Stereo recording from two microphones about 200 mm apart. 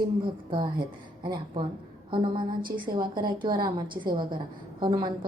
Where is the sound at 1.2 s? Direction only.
20° right (ahead or behind).